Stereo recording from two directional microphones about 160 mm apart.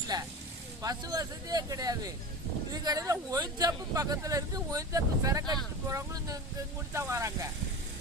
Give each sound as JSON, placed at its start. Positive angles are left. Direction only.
{"t": 0.1, "sound": "speech", "side_deg": -25}